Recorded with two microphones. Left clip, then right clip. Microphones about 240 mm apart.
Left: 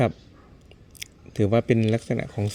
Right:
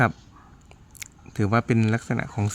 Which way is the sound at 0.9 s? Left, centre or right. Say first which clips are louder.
Left 4 dB; right.